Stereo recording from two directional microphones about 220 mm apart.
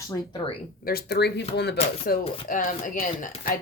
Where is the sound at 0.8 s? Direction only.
45° left (ahead or behind).